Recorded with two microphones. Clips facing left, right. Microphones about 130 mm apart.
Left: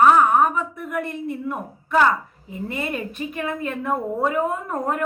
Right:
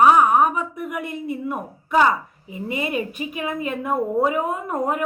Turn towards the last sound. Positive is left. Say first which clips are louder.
# right 1 dB
turn(degrees=-10)  # may be behind; listen again after turning